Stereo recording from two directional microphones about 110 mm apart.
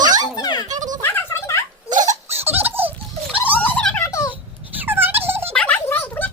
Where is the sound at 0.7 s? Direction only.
35° right (ahead or behind).